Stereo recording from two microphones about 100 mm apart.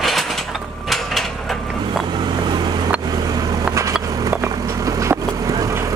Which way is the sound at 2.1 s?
50° right (ahead or behind).